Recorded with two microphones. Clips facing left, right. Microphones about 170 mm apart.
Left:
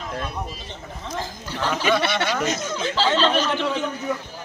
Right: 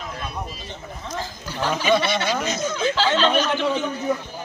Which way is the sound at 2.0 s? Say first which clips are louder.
Even; 65° left (ahead or behind).